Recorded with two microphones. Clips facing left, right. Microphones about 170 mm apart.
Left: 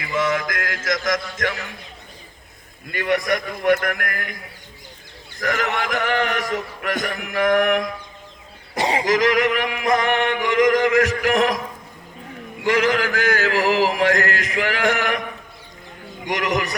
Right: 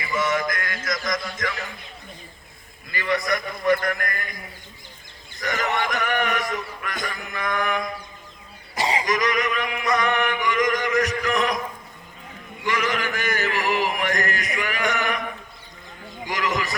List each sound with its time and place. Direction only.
0.0 s music: 75° left (ahead or behind); by 1.5 s 90° left
2.9 s a man's voice: 75° left (ahead or behind)
6.0 s a sound: 85° left
8.7 s a sound: 55° left (ahead or behind)
9.0 s music: 90° left
12.6 s music: 90° left
16.2 s a man's voice: 65° left (ahead or behind)